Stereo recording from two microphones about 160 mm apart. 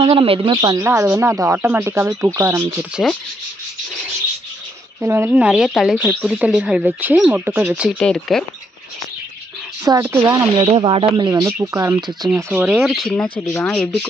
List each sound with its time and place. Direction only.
0.0 s speech: 35° right (ahead or behind); by 2.9 s 15° right (ahead or behind)
5.0 s speech: 15° right (ahead or behind)
7.9 s speech: 5° left (ahead or behind)
9.9 s speech: 20° right (ahead or behind); by 13.5 s 5° left (ahead or behind)